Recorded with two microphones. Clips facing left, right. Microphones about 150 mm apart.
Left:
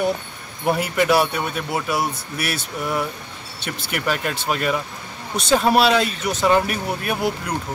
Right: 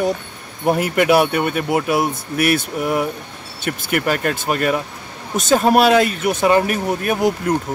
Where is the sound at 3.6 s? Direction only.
50° right (ahead or behind).